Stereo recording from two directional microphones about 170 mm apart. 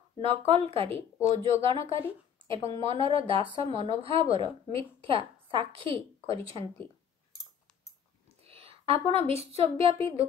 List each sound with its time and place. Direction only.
0.2 s a woman's voice: 35° right (ahead or behind)
8.5 s a sound: 35° right (ahead or behind)
9.3 s a woman's voice: 35° right (ahead or behind)